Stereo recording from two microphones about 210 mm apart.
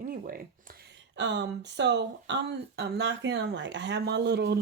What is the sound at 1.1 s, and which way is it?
Speech, 60° right (ahead or behind).